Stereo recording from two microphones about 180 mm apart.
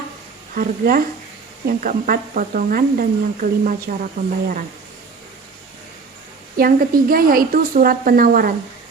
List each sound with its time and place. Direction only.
0.5 s speech: 50° right (ahead or behind)
6.6 s speech: 55° right (ahead or behind)